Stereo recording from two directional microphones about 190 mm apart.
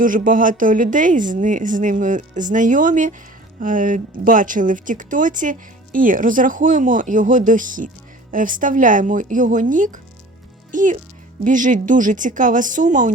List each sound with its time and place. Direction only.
0.0 s speech: 45° right (ahead or behind)